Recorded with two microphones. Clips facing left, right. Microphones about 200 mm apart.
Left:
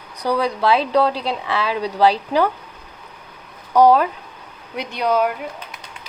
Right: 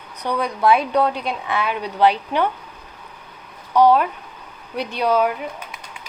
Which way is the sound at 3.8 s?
40° left (ahead or behind).